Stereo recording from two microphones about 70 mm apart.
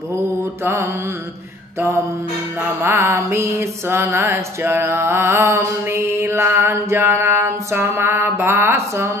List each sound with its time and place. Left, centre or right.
2.8 s music: right